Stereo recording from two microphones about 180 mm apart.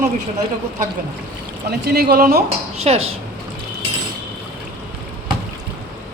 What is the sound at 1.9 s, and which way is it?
Speech, 60° right (ahead or behind).